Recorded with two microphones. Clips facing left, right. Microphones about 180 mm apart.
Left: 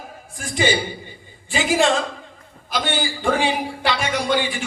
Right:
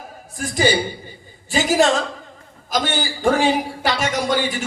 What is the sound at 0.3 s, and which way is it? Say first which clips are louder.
A woman's voice: right 2 dB; 40° right (ahead or behind).